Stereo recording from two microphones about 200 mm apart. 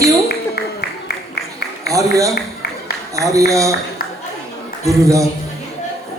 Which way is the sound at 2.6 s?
50° left (ahead or behind).